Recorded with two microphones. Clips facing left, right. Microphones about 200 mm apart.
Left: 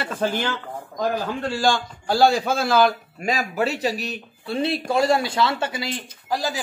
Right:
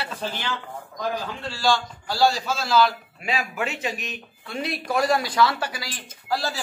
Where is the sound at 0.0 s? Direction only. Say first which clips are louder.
Left 7 dB; 50° left (ahead or behind).